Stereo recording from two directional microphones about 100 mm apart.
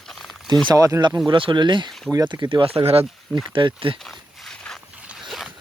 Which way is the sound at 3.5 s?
55° right (ahead or behind).